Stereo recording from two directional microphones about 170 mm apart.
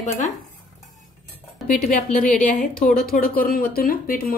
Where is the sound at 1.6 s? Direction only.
50° left (ahead or behind).